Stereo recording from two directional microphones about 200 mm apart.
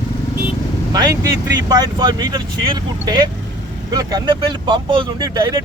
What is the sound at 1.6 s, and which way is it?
Speech, 20° right (ahead or behind).